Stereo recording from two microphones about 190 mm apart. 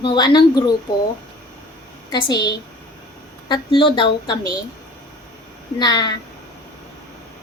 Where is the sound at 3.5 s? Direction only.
25° left (ahead or behind).